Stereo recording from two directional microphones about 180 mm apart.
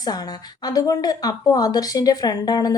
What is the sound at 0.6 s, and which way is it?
Speech, 20° left (ahead or behind).